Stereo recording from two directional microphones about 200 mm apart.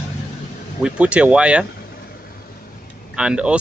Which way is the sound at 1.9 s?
50° left (ahead or behind).